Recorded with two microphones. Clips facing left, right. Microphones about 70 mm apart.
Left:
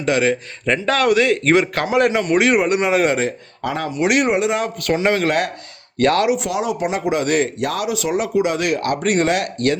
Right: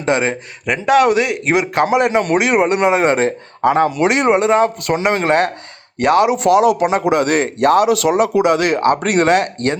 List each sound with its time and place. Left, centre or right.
0.0 s a man's voice: right
0.6 s a man's voice: centre; by 5.5 s right
6.0 s a man's voice: centre
6.5 s speech: right
7.0 s speech: right
7.9 s speech: right